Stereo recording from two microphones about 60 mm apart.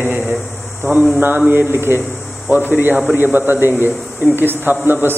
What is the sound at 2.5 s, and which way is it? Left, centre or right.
Speech, left.